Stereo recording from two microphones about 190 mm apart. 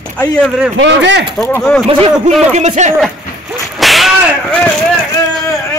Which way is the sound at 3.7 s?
Centre (ahead or behind).